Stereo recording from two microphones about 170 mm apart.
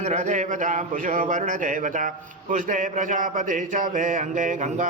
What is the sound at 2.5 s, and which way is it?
Speech, 50° right (ahead or behind).